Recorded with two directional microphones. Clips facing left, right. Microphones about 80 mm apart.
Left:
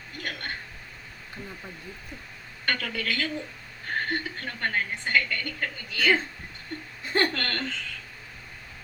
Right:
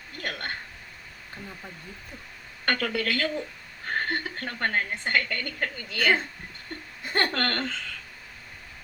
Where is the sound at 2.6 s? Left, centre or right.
Right.